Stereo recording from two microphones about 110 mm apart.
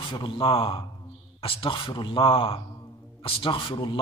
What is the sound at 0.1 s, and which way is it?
A man's voice, 50° left (ahead or behind).